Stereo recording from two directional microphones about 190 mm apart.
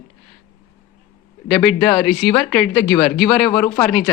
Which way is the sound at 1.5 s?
Centre (ahead or behind).